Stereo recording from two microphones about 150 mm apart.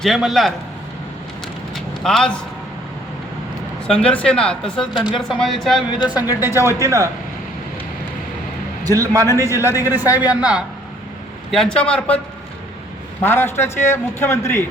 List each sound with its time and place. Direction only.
0.0 s speech: centre (ahead or behind)
1.7 s a sound: 5° left (ahead or behind)
3.8 s speech: 5° left (ahead or behind)
6.1 s speech: 15° right (ahead or behind)
8.9 s a man's voice: 25° right (ahead or behind)
9.2 s a man's voice: 20° left (ahead or behind)
9.8 s speech: 15° right (ahead or behind)
11.5 s a man's voice: 5° left (ahead or behind)
13.2 s a man's voice: 15° left (ahead or behind)